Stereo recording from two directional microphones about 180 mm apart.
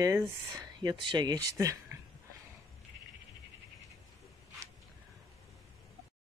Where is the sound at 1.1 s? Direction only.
20° right (ahead or behind).